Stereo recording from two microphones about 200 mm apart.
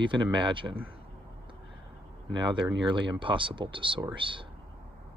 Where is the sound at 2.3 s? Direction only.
25° right (ahead or behind).